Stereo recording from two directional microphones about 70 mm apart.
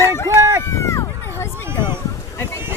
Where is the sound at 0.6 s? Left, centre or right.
Left.